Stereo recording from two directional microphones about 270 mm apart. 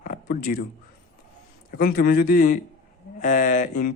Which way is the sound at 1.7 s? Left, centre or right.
Left.